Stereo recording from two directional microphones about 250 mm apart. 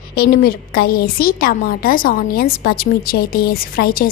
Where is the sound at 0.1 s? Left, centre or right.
Left.